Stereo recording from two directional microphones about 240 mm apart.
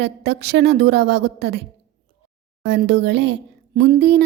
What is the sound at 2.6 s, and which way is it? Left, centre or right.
Speech, right.